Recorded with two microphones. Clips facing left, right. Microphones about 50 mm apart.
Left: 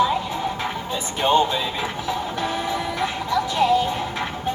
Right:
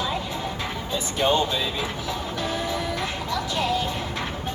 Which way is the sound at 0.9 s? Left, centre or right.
Left.